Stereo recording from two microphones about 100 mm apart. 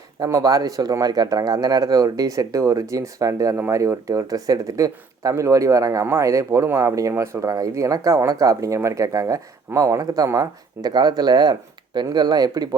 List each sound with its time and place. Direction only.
0.2 s speech: 35° right (ahead or behind)